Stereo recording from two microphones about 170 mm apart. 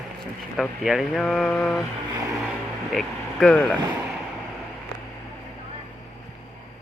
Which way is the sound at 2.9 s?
5° left (ahead or behind).